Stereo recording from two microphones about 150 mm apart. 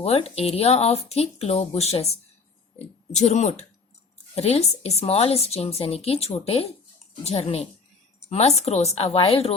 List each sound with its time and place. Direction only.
0.0 s speech: 45° left (ahead or behind)